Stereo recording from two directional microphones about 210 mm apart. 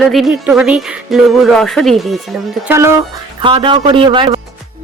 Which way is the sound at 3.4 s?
25° right (ahead or behind).